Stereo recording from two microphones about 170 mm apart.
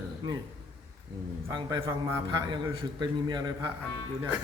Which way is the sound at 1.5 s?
20° right (ahead or behind).